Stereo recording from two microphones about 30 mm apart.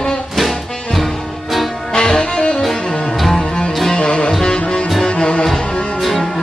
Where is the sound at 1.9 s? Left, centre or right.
Left.